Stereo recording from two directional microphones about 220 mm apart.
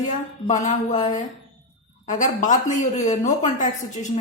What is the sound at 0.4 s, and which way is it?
Speech, 35° left (ahead or behind).